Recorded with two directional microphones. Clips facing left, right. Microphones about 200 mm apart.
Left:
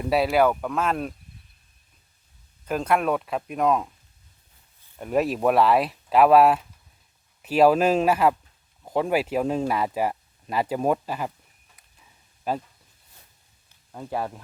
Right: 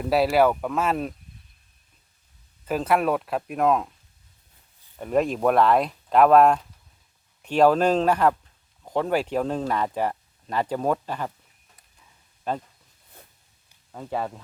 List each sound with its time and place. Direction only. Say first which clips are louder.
0.0 s speech: right 1 dB; centre (ahead or behind)
2.6 s speech: right 1 dB; 5° right (ahead or behind)
4.9 s speech: right 1 dB; 5° left (ahead or behind)
12.5 s speech: left 1 dB; 10° left (ahead or behind)
13.9 s speech: even; 5° left (ahead or behind)